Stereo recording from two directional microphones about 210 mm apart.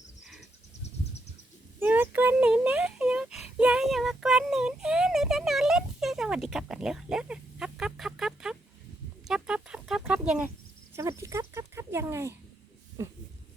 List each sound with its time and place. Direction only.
1.8 s whimper: 10° right (ahead or behind)
9.2 s music: 5° right (ahead or behind)
10.9 s a sound: 15° right (ahead or behind)